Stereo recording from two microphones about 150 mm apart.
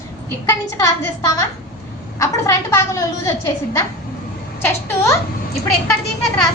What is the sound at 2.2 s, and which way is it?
A woman's voice, 20° left (ahead or behind).